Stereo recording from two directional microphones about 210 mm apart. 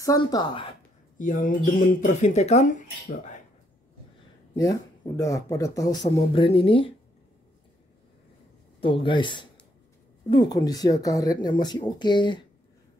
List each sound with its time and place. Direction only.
0.0 s speech: 15° left (ahead or behind)
1.1 s speech: 40° left (ahead or behind)
4.6 s speech: 15° left (ahead or behind)
6.0 s speech: 25° left (ahead or behind)
8.8 s speech: 25° left (ahead or behind)